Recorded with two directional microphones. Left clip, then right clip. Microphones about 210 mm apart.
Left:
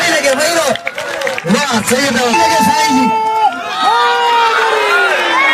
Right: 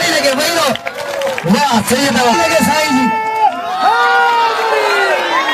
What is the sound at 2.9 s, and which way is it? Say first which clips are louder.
Run: left 2 dB; centre (ahead or behind).